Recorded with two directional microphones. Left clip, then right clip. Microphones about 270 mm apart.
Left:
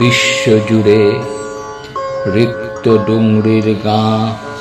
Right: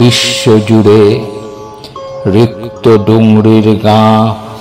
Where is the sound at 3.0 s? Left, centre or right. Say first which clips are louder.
Right 5 dB; right.